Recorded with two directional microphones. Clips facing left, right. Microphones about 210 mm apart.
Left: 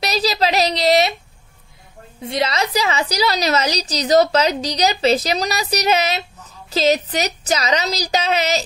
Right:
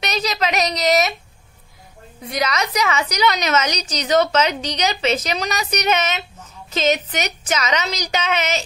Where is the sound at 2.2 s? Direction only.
30° left (ahead or behind).